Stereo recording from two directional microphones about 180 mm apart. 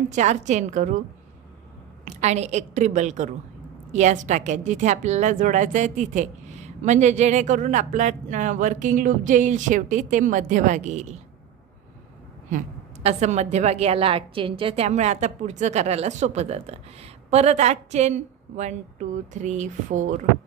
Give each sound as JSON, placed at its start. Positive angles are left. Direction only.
{"t": 0.1, "sound": "a woman's voice", "side_deg": -40}
{"t": 2.0, "sound": "a woman's voice", "side_deg": -40}
{"t": 12.4, "sound": "a woman's voice", "side_deg": -45}